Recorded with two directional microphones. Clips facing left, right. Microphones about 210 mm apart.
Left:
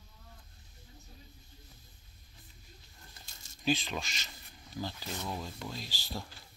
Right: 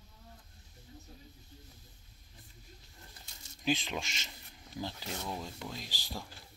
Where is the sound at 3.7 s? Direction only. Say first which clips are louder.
Left 1 dB; 20° right (ahead or behind).